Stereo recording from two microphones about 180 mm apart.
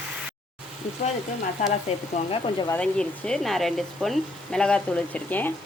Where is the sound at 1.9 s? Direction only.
35° left (ahead or behind).